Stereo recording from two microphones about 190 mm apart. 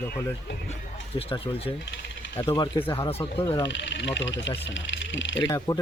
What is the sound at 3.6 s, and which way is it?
Speech, 70° left (ahead or behind).